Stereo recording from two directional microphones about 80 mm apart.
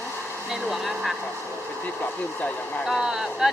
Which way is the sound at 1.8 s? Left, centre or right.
Left.